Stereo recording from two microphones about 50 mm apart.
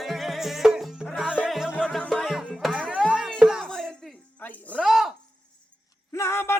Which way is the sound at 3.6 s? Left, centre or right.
Centre.